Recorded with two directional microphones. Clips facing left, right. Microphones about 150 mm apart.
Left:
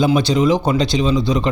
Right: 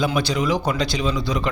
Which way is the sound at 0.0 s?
25° left (ahead or behind).